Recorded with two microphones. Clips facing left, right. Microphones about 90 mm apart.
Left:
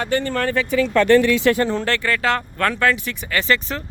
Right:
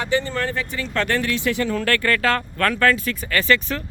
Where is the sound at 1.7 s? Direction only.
20° left (ahead or behind).